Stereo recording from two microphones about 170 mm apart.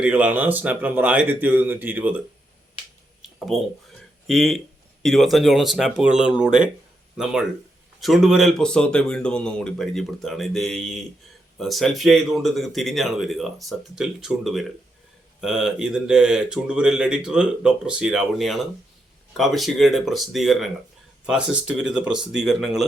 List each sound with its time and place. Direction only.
0.0 s speech: 10° right (ahead or behind)
3.2 s a sound: centre (ahead or behind)
4.3 s speech: centre (ahead or behind)
8.0 s speech: centre (ahead or behind)